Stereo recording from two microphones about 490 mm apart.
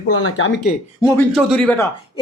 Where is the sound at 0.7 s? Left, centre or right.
Centre.